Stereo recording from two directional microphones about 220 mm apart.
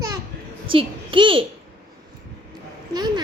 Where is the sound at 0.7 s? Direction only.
25° right (ahead or behind).